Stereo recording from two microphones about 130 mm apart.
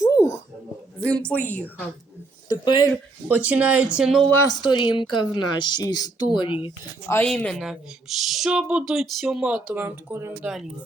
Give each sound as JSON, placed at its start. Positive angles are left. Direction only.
{"t": 0.0, "sound": "a sound", "side_deg": 25}
{"t": 1.0, "sound": "a woman's voice", "side_deg": 10}
{"t": 2.5, "sound": "speech", "side_deg": 25}
{"t": 3.2, "sound": "speech", "side_deg": -10}
{"t": 4.6, "sound": "speech", "side_deg": 40}
{"t": 7.3, "sound": "speech", "side_deg": 5}